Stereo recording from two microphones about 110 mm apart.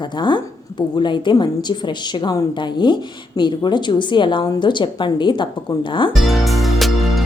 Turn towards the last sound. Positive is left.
turn(degrees=0)  # may be behind; listen again after turning